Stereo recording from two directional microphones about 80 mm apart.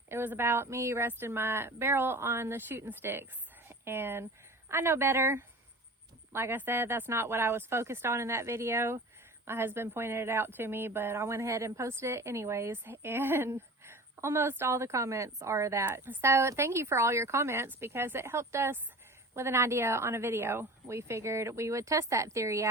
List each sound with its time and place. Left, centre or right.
0.1 s speech: right
15.9 s speech: right